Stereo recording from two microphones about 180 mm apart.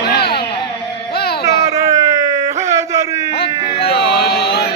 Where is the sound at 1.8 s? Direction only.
20° right (ahead or behind).